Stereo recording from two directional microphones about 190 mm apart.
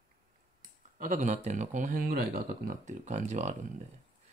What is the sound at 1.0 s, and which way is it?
Speech, 40° right (ahead or behind).